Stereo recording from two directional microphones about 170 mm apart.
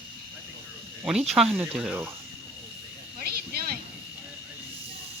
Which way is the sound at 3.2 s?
65° right (ahead or behind).